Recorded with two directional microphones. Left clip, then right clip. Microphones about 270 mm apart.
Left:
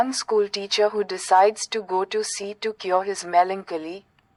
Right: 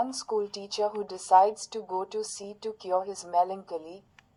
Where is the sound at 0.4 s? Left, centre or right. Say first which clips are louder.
Left 11 dB; left.